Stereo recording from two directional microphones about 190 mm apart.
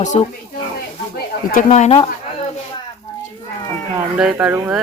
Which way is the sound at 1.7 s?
35° left (ahead or behind).